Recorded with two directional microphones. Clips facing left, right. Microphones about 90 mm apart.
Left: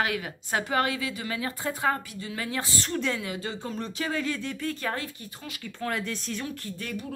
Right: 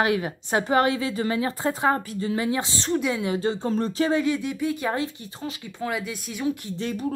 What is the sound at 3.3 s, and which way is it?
Speech, 30° right (ahead or behind).